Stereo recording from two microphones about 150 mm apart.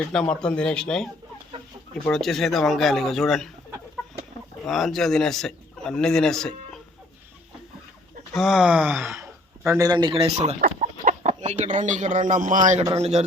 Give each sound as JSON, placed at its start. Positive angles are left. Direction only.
{"t": 0.1, "sound": "speech", "side_deg": 5}
{"t": 2.0, "sound": "speech", "side_deg": 0}
{"t": 4.6, "sound": "speech", "side_deg": 0}
{"t": 8.3, "sound": "speech", "side_deg": 0}
{"t": 9.6, "sound": "speech", "side_deg": -25}
{"t": 10.6, "sound": "speech", "side_deg": -65}
{"t": 12.9, "sound": "a man's voice", "side_deg": -45}